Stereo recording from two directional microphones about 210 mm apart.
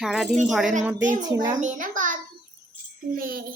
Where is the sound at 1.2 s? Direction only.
20° right (ahead or behind).